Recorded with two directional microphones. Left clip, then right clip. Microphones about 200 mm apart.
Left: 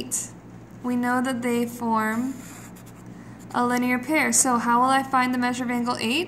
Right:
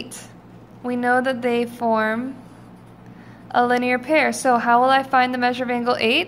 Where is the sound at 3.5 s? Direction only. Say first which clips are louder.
Right 5 dB; 15° right (ahead or behind).